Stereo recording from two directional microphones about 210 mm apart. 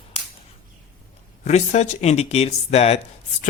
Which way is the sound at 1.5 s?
35° left (ahead or behind).